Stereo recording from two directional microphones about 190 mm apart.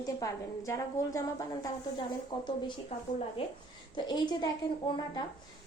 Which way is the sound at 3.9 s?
25° left (ahead or behind).